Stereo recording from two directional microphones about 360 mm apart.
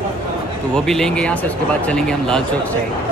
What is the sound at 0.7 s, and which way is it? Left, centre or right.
A man's voice, centre.